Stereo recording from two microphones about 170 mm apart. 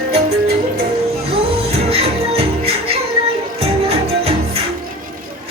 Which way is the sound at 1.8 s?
35° right (ahead or behind).